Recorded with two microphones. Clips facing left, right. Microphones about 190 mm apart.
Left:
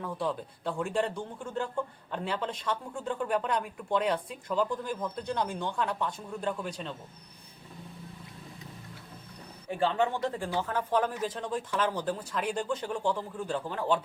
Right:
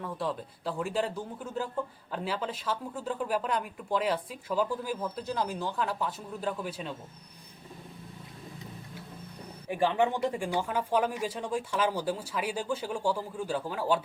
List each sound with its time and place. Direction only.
0.0 s speech: centre (ahead or behind)
9.6 s speech: 15° right (ahead or behind)